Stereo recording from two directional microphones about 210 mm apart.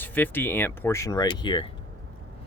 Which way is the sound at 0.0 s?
10° left (ahead or behind).